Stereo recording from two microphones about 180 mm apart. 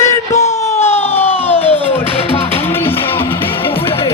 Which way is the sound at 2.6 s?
10° left (ahead or behind).